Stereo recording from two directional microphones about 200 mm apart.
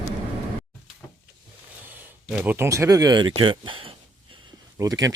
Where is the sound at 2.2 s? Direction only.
5° right (ahead or behind).